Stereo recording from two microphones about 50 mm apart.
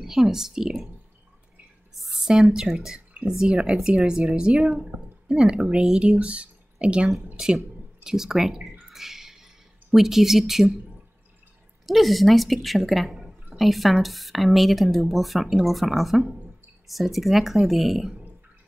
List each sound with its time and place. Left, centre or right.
0.0 s speech: centre
2.0 s a sound: centre
2.5 s speech: centre
5.8 s speech: centre
6.0 s speech: right
8.0 s speech: centre
8.9 s a sound: centre
11.8 s speech: centre